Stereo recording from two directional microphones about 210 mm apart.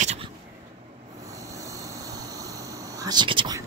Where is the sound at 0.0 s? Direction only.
30° right (ahead or behind).